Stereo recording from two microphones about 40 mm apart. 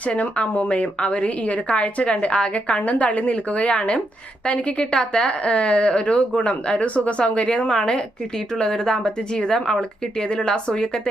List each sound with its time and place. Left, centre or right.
0.0 s a woman's voice: left
0.4 s speech: left
0.7 s a woman's voice: left